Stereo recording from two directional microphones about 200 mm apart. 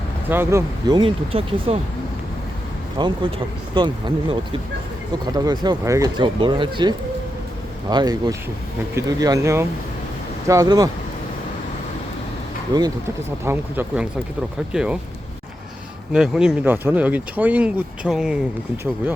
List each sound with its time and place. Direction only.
0.3 s speech: 10° right (ahead or behind); by 1.8 s 30° right (ahead or behind)
3.0 s speech: 25° right (ahead or behind)
12.7 s speech: 20° right (ahead or behind)
13.4 s speech: 10° right (ahead or behind)
16.1 s speech: 5° right (ahead or behind)